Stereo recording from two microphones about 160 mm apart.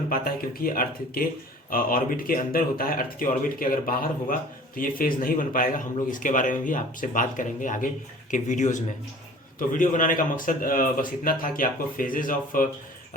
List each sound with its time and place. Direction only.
0.1 s speech: 65° left (ahead or behind)